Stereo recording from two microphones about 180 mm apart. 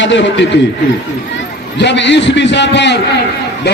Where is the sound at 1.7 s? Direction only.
75° left (ahead or behind).